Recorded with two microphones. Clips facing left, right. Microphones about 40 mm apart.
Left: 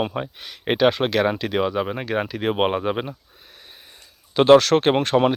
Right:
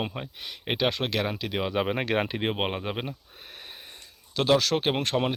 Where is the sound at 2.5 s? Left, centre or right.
Centre.